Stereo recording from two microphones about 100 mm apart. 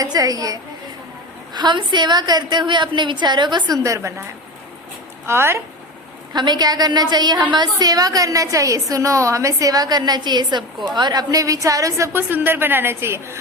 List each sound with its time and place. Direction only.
0.0 s a woman's voice: 35° right (ahead or behind)
1.5 s a woman's voice: 50° right (ahead or behind)
3.8 s a woman's voice: 30° right (ahead or behind)
5.2 s speech: 25° right (ahead or behind)
6.3 s a woman's voice: 45° right (ahead or behind); by 13.3 s 25° right (ahead or behind)